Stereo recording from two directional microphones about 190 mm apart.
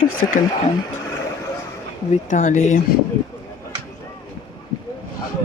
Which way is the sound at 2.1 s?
40° left (ahead or behind).